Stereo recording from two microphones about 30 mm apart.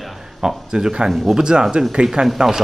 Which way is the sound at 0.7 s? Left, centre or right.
Centre.